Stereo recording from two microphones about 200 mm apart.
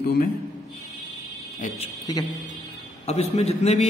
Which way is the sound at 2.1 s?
20° left (ahead or behind).